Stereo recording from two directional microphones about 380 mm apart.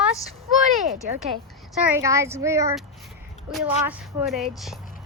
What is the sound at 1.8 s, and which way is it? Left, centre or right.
A woman's voice, centre.